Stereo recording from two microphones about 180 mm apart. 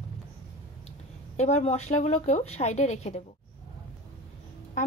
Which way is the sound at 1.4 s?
35° left (ahead or behind).